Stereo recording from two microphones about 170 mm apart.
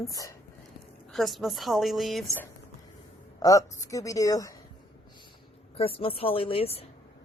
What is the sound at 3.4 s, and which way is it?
A woman's voice, 20° left (ahead or behind).